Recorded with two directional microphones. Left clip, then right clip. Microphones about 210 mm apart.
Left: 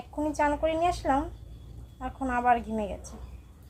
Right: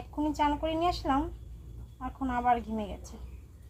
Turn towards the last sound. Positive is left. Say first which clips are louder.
# left 3 dB
turn(degrees=10)  # may be behind; listen again after turning